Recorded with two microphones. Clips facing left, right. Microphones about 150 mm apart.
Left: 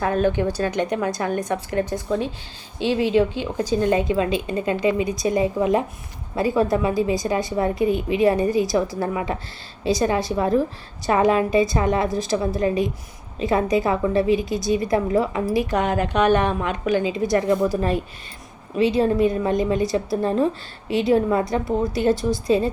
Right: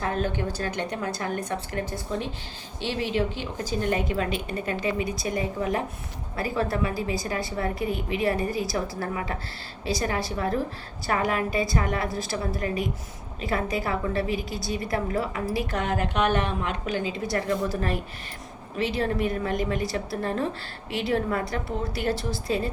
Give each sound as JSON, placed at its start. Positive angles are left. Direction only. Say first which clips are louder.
{"t": 0.3, "sound": "a woman's voice", "louder": "left 7 dB", "side_deg": 15}